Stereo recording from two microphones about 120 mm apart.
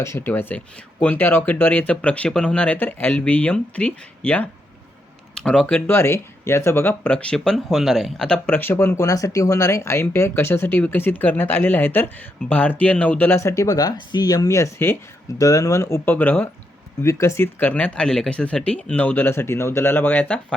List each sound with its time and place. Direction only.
0.0 s speech: 20° left (ahead or behind)